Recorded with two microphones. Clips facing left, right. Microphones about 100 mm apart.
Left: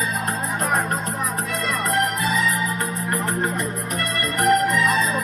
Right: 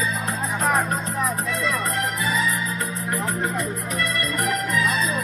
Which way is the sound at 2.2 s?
60° left (ahead or behind).